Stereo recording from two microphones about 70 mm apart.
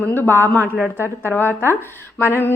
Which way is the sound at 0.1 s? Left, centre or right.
Left.